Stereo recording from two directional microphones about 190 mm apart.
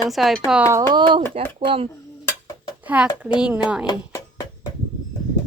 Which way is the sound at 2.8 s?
5° right (ahead or behind).